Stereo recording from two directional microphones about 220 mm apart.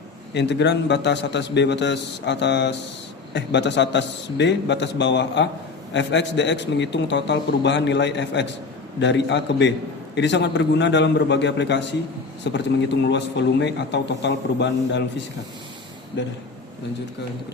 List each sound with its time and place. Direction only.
0.3 s a man's voice: 50° left (ahead or behind)
16.2 s a man's voice: 55° left (ahead or behind)